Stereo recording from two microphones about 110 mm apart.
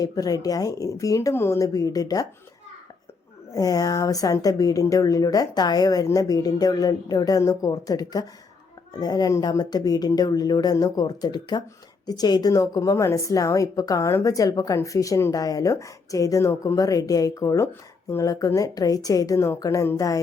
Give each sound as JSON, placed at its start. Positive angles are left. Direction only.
{"t": 0.0, "sound": "a woman's voice", "side_deg": 35}
{"t": 3.5, "sound": "a woman's voice", "side_deg": 35}